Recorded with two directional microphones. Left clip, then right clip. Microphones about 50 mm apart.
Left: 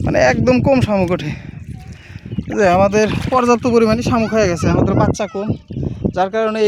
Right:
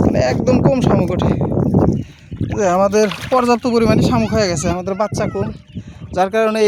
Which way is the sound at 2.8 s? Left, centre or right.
Right.